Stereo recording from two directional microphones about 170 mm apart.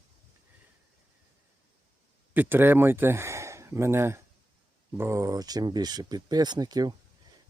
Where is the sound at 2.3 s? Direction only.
10° right (ahead or behind).